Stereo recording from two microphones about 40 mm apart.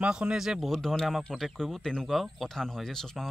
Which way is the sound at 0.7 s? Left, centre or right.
Centre.